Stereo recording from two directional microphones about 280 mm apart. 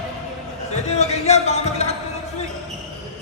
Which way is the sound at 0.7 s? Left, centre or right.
Left.